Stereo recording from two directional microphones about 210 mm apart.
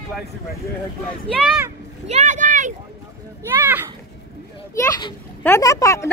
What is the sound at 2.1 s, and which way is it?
Speech, 35° right (ahead or behind).